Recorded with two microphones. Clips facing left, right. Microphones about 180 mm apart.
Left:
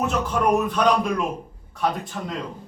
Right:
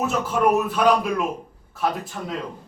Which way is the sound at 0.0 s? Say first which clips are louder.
Right 1 dB; 5° right (ahead or behind).